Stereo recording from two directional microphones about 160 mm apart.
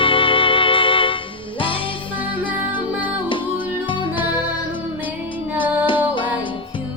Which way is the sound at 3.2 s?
30° left (ahead or behind).